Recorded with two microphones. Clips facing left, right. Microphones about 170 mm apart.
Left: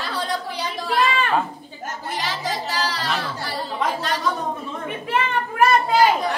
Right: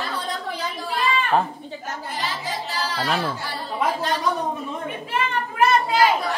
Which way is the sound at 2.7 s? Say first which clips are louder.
Left 2 dB; 90° left.